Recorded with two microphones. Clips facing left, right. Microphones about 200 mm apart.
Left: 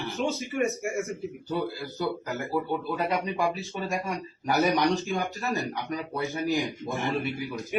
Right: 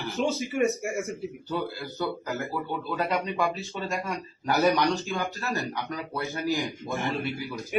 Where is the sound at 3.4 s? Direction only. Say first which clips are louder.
Even; 15° left (ahead or behind).